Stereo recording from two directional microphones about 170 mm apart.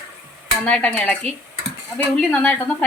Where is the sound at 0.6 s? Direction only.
10° left (ahead or behind).